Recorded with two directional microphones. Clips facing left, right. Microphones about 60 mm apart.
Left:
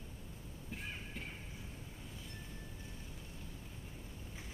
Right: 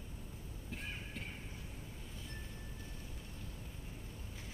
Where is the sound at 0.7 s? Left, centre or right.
Centre.